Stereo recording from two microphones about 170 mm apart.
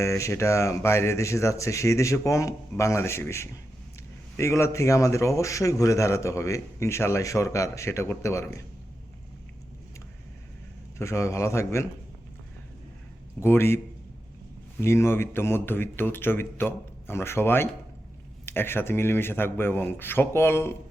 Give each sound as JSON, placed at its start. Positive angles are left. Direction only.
{"t": 0.0, "sound": "a man's voice", "side_deg": 15}
{"t": 10.9, "sound": "a man's voice", "side_deg": 15}
{"t": 13.4, "sound": "a man's voice", "side_deg": 15}